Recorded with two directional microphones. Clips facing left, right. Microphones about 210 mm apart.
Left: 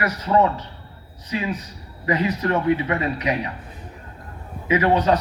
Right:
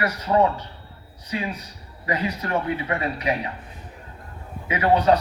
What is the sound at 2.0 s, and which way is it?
Speech, 25° left (ahead or behind).